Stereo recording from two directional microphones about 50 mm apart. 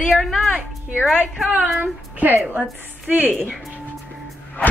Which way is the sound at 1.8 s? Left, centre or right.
Right.